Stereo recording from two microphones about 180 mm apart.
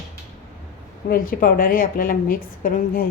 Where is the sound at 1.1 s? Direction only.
50° left (ahead or behind).